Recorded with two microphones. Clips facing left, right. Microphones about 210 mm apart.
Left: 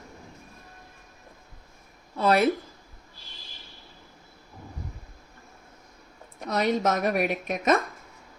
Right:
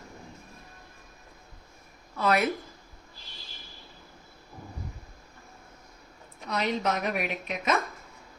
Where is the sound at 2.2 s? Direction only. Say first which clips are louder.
Left 4 dB; 30° left (ahead or behind).